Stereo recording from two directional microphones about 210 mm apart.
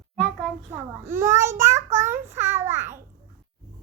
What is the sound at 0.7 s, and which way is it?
Child singing, 10° right (ahead or behind).